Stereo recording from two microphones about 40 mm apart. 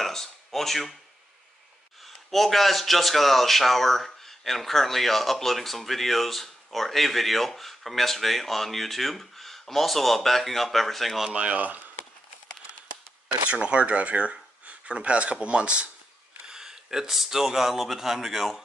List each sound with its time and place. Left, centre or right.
0.0 s a sound: centre
2.0 s speech: centre
11.3 s speech: right
13.5 s speech: right
16.4 s speech: centre